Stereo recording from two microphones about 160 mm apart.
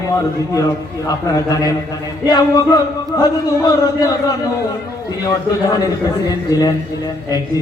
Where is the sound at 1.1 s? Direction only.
25° left (ahead or behind).